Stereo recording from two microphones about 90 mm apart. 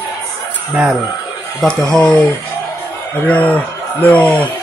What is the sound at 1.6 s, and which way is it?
Speech, 10° left (ahead or behind).